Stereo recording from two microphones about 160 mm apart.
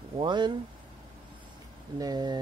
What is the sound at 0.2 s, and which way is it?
Speech, 30° right (ahead or behind).